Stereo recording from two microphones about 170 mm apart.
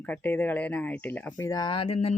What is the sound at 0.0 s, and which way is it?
A man's voice, 10° left (ahead or behind).